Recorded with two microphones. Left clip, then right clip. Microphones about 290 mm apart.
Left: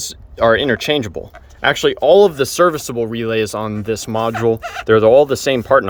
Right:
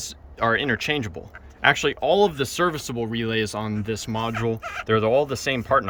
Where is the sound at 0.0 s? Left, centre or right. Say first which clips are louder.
Left 9 dB; left.